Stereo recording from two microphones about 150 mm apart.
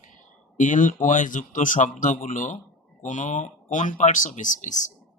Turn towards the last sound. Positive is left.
turn(degrees=55)  # may be behind; listen again after turning